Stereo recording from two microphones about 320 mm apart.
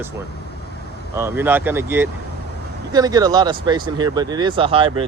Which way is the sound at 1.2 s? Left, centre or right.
Centre.